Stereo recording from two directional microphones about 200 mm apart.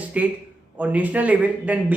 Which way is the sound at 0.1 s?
5° right (ahead or behind).